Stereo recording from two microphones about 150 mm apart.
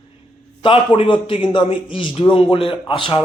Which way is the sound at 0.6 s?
35° left (ahead or behind).